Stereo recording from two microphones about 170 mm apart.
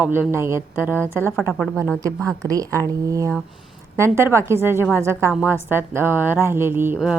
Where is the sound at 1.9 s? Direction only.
20° right (ahead or behind).